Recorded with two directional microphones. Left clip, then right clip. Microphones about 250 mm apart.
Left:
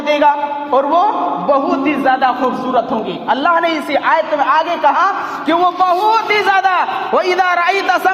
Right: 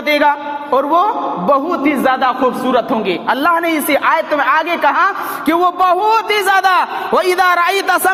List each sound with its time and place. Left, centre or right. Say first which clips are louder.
0.1 s a woman's voice: left 1 dB; right